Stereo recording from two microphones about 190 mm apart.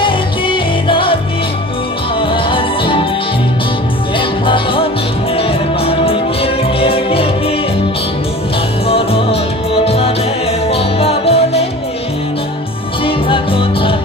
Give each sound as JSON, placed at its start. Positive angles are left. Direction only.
{"t": 0.0, "sound": "music", "side_deg": 25}
{"t": 2.5, "sound": "music", "side_deg": 25}
{"t": 5.9, "sound": "music", "side_deg": 30}
{"t": 8.8, "sound": "music", "side_deg": 30}
{"t": 13.0, "sound": "music", "side_deg": 30}